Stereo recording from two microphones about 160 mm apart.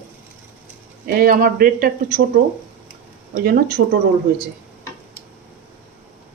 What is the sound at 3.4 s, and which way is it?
Speech, 70° right (ahead or behind).